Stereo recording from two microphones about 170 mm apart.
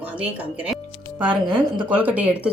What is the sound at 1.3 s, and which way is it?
Speech, 30° right (ahead or behind).